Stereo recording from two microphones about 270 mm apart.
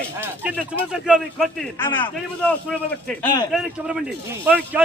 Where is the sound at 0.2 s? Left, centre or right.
Centre.